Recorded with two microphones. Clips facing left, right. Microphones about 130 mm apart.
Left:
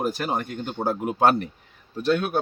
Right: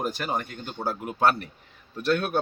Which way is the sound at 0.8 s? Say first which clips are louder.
Left 3 dB; 20° left (ahead or behind).